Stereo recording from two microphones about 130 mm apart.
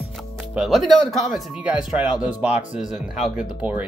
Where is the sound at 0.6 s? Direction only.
Centre (ahead or behind).